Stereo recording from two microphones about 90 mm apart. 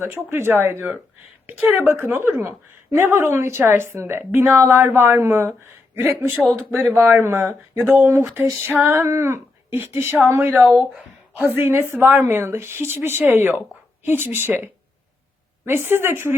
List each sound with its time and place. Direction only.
0.0 s a woman's voice: 25° right (ahead or behind)
10.8 s speech: 5° right (ahead or behind)
11.4 s a woman's voice: 25° right (ahead or behind)